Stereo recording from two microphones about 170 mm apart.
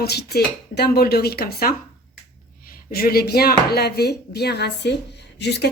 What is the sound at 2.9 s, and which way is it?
A woman's voice, 60° left (ahead or behind).